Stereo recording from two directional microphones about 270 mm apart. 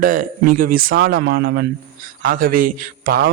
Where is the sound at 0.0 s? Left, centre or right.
Right.